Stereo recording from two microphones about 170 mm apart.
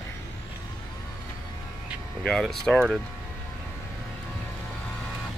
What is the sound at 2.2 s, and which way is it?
Speech, centre (ahead or behind).